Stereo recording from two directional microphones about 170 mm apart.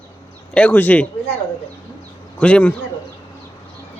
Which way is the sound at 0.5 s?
10° left (ahead or behind).